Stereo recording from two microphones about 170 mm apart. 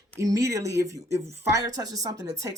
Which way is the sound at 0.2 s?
20° right (ahead or behind).